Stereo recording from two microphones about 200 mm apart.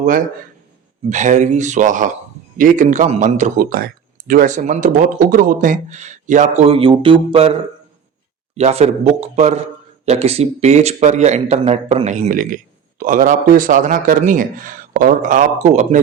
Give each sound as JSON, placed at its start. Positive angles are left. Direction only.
{"t": 1.1, "sound": "a man's voice", "side_deg": -35}